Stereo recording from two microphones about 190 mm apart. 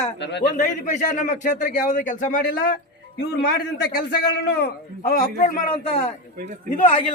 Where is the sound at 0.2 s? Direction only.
65° left (ahead or behind).